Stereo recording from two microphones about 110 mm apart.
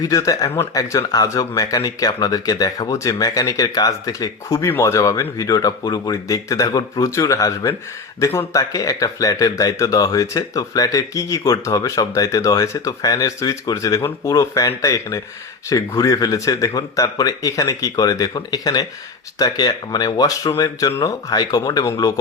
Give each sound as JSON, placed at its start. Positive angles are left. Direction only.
{"t": 0.0, "sound": "speech", "side_deg": 35}
{"t": 8.5, "sound": "speech", "side_deg": 30}